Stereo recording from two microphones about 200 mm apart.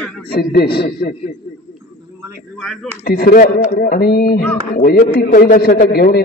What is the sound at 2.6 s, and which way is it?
Speech, centre (ahead or behind).